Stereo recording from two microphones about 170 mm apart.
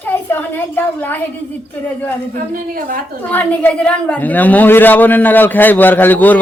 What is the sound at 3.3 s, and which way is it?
A woman's voice, 10° left (ahead or behind).